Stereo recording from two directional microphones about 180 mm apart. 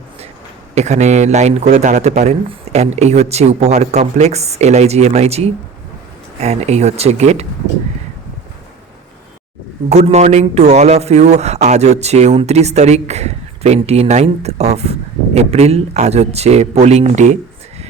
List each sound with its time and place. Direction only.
0.8 s speech: 40° right (ahead or behind)
9.9 s speech: 40° right (ahead or behind)